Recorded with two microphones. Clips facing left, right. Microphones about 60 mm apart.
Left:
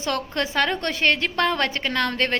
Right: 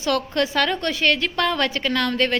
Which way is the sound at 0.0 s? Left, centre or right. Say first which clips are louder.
Right 4 dB; left.